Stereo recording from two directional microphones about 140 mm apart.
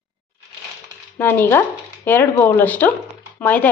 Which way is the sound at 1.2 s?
15° left (ahead or behind).